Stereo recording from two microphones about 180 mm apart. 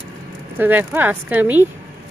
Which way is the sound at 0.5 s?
10° right (ahead or behind).